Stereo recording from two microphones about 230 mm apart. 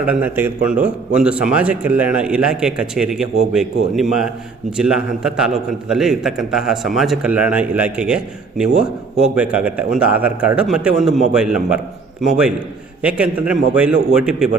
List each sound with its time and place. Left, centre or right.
0.0 s speech: centre